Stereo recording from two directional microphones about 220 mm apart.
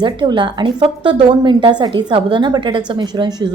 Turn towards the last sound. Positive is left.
turn(degrees=-20)  # may be behind; listen again after turning